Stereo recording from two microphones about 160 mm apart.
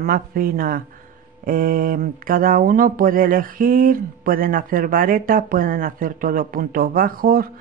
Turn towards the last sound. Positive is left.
turn(degrees=-65)  # may be behind; listen again after turning